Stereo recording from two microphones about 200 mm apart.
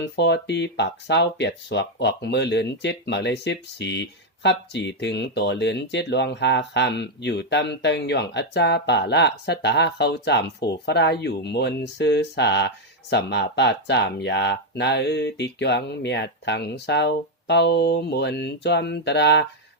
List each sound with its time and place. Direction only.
0.2 s speech: 60° left (ahead or behind)